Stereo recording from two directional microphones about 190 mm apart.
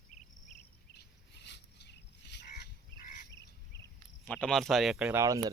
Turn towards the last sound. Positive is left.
turn(degrees=-5)  # may be behind; listen again after turning